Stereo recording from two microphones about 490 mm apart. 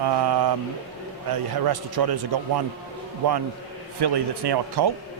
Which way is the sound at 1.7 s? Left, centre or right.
Right.